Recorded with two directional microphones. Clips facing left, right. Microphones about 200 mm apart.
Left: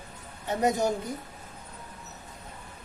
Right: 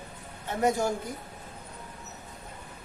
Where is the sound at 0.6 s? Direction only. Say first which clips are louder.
Even; 20° left (ahead or behind).